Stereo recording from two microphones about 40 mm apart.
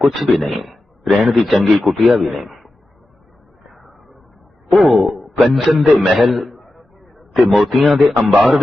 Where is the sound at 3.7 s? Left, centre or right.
Centre.